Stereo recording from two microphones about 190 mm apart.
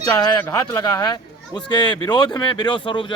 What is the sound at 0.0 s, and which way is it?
Speech, 20° left (ahead or behind).